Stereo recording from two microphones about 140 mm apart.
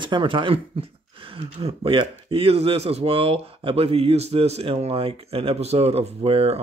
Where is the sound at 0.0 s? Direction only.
35° right (ahead or behind).